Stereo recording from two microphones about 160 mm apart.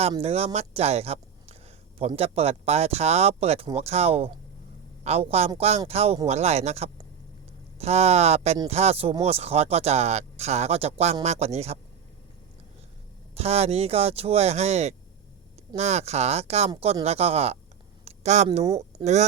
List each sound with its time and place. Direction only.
0.2 s speech: 40° right (ahead or behind)
13.3 s speech: 40° right (ahead or behind)
18.0 s a sound: 45° right (ahead or behind)